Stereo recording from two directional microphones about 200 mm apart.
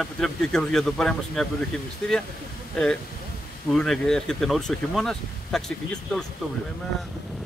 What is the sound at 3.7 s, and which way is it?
Speech, centre (ahead or behind).